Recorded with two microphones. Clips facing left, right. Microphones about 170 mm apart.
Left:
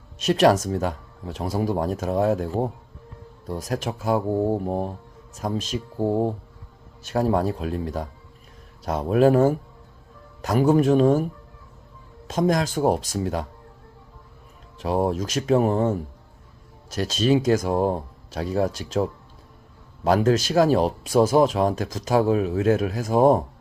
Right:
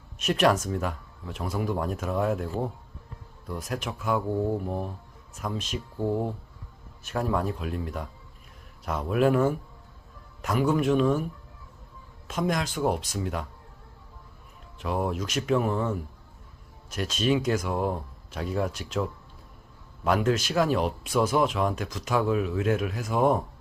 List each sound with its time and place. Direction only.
0.3 s speech: 40° left (ahead or behind)
12.3 s speech: 40° left (ahead or behind)
14.8 s speech: 35° left (ahead or behind)